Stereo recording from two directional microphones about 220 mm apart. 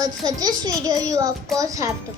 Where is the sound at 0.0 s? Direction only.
15° right (ahead or behind).